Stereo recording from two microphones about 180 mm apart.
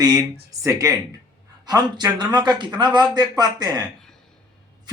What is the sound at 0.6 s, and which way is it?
Speech, 20° right (ahead or behind).